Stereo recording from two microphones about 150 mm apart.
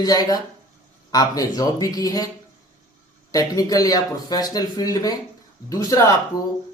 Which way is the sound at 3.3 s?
25° left (ahead or behind).